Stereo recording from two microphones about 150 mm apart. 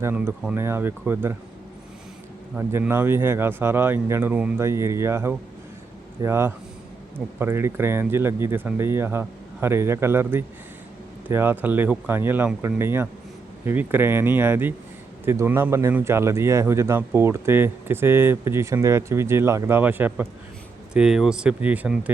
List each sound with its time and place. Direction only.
0.0 s speech: 15° right (ahead or behind)
2.6 s speech: 15° right (ahead or behind)